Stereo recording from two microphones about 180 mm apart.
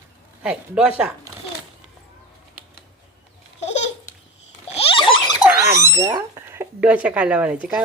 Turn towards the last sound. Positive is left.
turn(degrees=-5)  # may be behind; listen again after turning